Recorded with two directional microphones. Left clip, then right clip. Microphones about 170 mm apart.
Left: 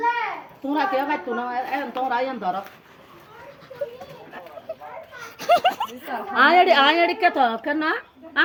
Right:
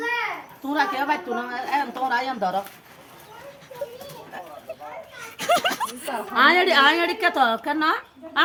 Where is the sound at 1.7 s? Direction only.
25° right (ahead or behind).